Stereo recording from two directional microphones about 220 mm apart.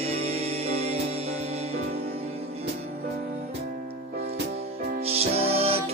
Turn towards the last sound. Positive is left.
turn(degrees=-25)  # may be behind; listen again after turning